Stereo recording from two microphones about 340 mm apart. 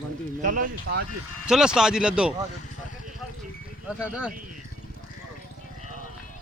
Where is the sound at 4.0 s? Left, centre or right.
Centre.